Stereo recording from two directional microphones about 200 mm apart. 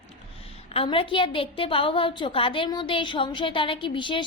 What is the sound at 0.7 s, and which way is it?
A woman's voice, 30° left (ahead or behind).